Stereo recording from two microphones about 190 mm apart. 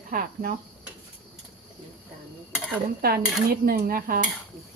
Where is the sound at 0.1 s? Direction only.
50° right (ahead or behind).